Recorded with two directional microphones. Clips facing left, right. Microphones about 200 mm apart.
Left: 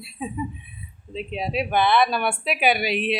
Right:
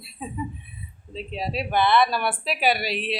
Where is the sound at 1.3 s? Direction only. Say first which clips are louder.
Left 2 dB; centre (ahead or behind).